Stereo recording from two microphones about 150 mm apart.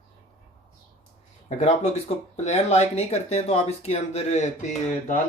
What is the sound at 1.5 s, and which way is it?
Speech, 45° left (ahead or behind).